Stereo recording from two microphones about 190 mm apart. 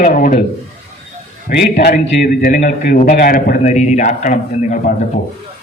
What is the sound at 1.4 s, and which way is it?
A man's voice, 55° left (ahead or behind).